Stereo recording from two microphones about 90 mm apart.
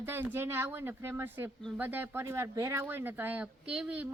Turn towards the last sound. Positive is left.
turn(degrees=-15)  # may be behind; listen again after turning